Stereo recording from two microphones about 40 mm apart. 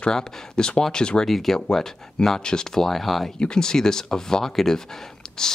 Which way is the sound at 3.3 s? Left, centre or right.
Left.